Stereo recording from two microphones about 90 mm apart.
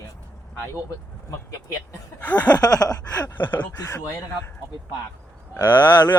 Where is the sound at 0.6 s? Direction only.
30° left (ahead or behind).